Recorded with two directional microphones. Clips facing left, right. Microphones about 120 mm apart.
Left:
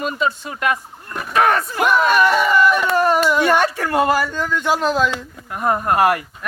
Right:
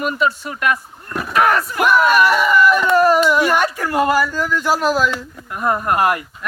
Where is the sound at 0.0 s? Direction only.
25° left (ahead or behind).